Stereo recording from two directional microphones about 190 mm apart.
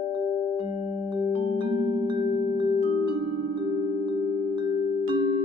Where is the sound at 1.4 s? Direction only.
35° left (ahead or behind).